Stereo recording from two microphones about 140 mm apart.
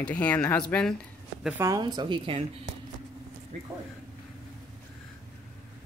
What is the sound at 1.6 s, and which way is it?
Speech, 25° right (ahead or behind).